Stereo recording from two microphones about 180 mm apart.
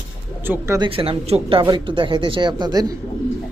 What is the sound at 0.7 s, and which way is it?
Speech, 30° right (ahead or behind).